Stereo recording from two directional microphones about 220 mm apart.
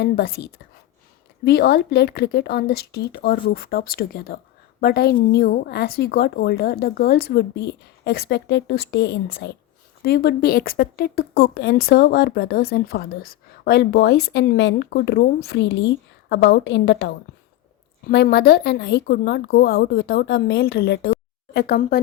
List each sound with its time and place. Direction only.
0.0 s speech: 45° left (ahead or behind)